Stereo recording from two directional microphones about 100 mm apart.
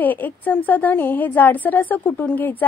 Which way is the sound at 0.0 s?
20° left (ahead or behind).